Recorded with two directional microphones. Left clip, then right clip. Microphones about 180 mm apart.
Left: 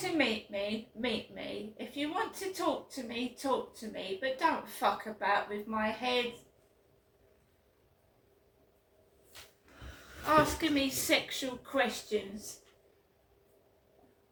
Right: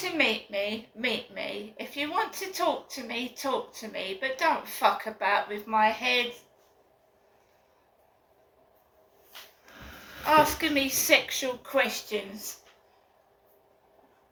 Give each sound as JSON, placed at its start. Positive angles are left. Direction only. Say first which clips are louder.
{"t": 0.0, "sound": "speech", "louder": "right 5 dB", "side_deg": 15}
{"t": 10.2, "sound": "a woman's voice", "louder": "right 5 dB", "side_deg": 20}